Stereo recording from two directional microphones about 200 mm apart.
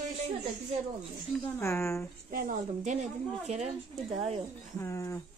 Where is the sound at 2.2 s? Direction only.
45° right (ahead or behind).